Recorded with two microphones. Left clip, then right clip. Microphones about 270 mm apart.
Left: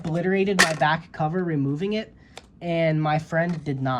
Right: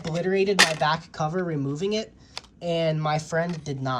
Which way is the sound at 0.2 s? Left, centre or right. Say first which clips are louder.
Even; centre.